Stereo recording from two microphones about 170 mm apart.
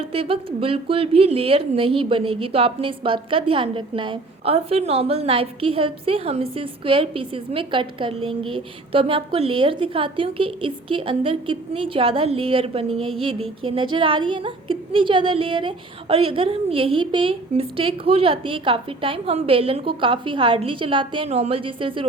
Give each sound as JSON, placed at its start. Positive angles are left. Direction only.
{"t": 0.0, "sound": "speech", "side_deg": -35}